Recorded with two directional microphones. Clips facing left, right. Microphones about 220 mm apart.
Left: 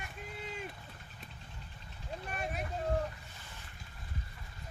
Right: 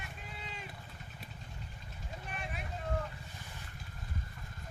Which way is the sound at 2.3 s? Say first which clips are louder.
Left 5 dB; 45° left (ahead or behind).